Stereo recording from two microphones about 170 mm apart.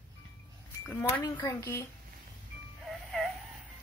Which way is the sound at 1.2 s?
20° left (ahead or behind).